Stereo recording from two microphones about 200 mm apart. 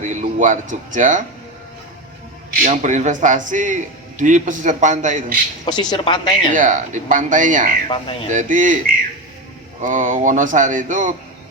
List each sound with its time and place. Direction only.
0.0 s a man's voice: 40° right (ahead or behind)
2.6 s a man's voice: 40° right (ahead or behind)
5.6 s speech: 20° left (ahead or behind)
6.5 s a man's voice: 40° right (ahead or behind)
7.9 s speech: 25° left (ahead or behind)
8.3 s a man's voice: 40° right (ahead or behind)
9.8 s a man's voice: 40° right (ahead or behind)